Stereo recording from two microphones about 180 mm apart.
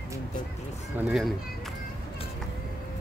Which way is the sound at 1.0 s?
5° right (ahead or behind).